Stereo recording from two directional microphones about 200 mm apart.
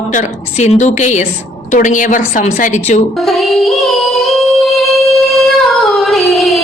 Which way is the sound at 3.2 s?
Centre (ahead or behind).